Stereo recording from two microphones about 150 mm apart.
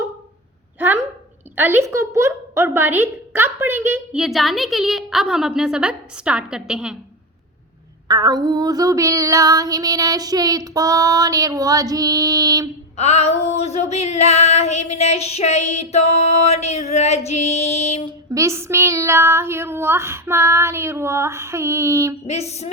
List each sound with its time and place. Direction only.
0.8 s a sound: 15° right (ahead or behind)
1.5 s female singing: 15° right (ahead or behind)
4.2 s a woman's voice: centre (ahead or behind)
8.0 s female singing: 25° right (ahead or behind)
13.0 s female singing: 45° left (ahead or behind)
18.3 s female singing: 20° right (ahead or behind)
22.3 s female singing: 45° left (ahead or behind)